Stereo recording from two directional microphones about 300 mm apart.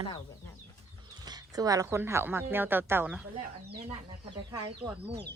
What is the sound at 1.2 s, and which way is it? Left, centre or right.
Speech, centre.